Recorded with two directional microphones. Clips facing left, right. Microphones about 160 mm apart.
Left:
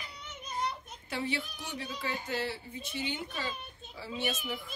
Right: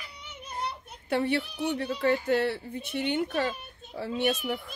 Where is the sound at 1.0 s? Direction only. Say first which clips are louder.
Right 8 dB; 60° right (ahead or behind).